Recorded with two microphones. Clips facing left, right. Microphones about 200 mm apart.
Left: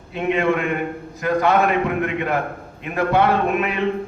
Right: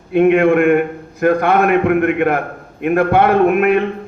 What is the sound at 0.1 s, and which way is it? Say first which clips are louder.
A man's voice: right 9 dB; 55° right (ahead or behind).